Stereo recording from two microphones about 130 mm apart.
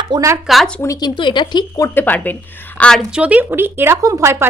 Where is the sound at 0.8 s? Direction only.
30° left (ahead or behind).